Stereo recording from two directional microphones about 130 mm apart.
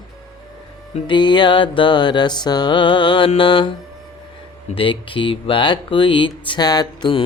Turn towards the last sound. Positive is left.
turn(degrees=35)  # may be behind; listen again after turning